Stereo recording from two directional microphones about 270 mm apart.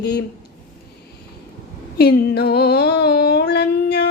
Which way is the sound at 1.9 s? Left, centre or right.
Left.